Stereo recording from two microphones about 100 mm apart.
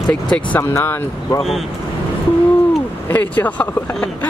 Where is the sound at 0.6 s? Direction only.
25° left (ahead or behind).